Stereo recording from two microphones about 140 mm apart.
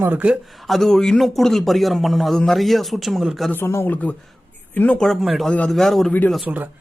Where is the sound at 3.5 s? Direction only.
15° left (ahead or behind).